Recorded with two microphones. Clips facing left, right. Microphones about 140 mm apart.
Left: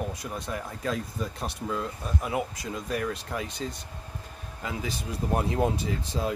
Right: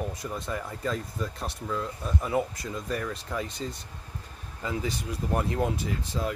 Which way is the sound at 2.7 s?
10° left (ahead or behind).